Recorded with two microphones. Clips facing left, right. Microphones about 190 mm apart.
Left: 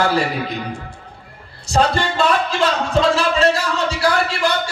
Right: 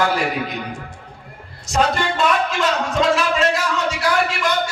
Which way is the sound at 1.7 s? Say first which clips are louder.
Left 2 dB; 30° left (ahead or behind).